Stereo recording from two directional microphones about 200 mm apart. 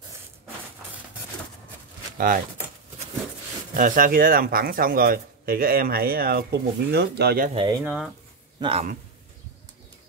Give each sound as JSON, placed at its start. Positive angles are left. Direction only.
{"t": 2.1, "sound": "speech", "side_deg": -45}
{"t": 3.7, "sound": "speech", "side_deg": -45}
{"t": 7.8, "sound": "speech", "side_deg": -5}
{"t": 8.5, "sound": "speech", "side_deg": -25}